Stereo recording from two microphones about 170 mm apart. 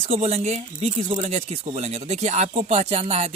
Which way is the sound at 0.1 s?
35° right (ahead or behind).